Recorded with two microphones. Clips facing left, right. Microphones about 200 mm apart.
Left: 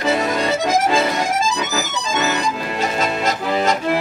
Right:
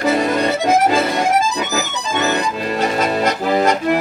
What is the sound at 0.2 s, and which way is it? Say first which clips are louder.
Accordion: right 2 dB; 60° right (ahead or behind).